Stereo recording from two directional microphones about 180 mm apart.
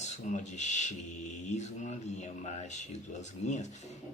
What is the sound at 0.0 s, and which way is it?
Speech, 40° left (ahead or behind).